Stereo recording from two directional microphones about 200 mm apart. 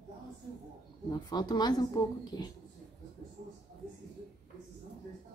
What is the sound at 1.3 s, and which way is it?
A woman's voice, 20° left (ahead or behind).